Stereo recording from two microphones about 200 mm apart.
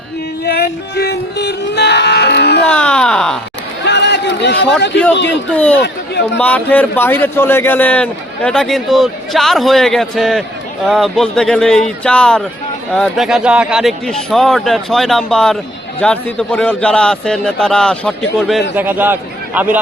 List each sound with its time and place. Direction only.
0.4 s music: 50° left (ahead or behind)
2.6 s speech: 5° left (ahead or behind)
3.8 s a sound: 60° left (ahead or behind)
5.5 s a man's voice: 5° left (ahead or behind)
18.8 s a man's voice: 10° right (ahead or behind)